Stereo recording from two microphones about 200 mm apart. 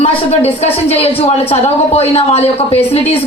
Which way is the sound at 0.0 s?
30° left (ahead or behind).